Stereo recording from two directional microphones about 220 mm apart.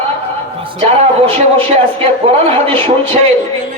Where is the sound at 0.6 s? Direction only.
25° right (ahead or behind).